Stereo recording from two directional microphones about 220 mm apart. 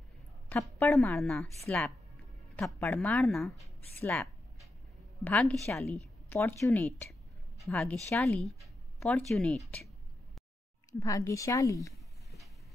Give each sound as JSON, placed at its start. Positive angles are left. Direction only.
{"t": 0.5, "sound": "a woman's voice", "side_deg": 10}
{"t": 2.5, "sound": "a woman's voice", "side_deg": 5}
{"t": 3.9, "sound": "a sound", "side_deg": 5}
{"t": 5.2, "sound": "a woman's voice", "side_deg": 5}
{"t": 11.0, "sound": "speech", "side_deg": 15}
{"t": 11.9, "sound": "a sound", "side_deg": 0}